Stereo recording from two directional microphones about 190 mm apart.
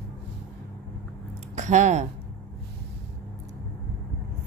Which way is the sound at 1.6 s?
40° right (ahead or behind).